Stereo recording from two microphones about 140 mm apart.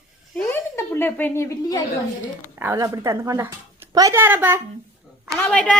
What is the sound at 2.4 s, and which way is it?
A child's voice, 15° right (ahead or behind).